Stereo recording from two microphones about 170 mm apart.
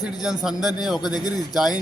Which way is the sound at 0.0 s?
5° right (ahead or behind).